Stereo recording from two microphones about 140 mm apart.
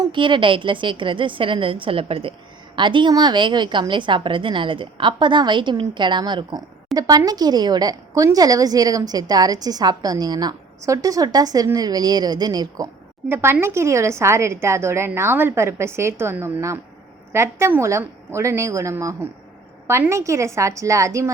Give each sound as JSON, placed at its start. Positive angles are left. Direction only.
{"t": 0.0, "sound": "a woman's voice", "side_deg": -35}
{"t": 13.2, "sound": "speech", "side_deg": -15}